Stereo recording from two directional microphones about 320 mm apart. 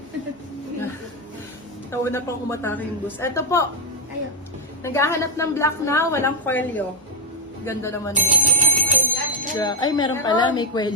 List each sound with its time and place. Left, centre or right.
1.9 s a woman's voice: centre
4.8 s a woman's voice: centre
8.1 s speech: right
9.6 s a woman's voice: centre